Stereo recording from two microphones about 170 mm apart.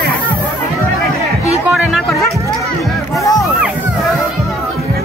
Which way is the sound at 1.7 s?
Centre (ahead or behind).